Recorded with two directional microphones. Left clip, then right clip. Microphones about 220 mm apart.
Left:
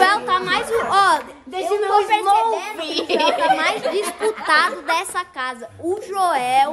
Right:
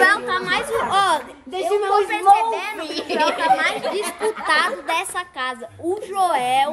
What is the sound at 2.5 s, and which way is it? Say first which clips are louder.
Speech: left 2 dB; 45° left (ahead or behind).